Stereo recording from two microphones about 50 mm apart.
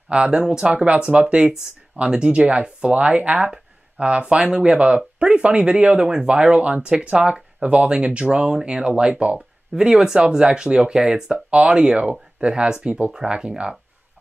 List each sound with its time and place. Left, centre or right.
0.1 s speech: centre